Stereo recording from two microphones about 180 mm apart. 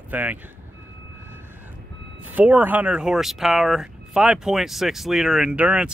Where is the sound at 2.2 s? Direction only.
10° right (ahead or behind).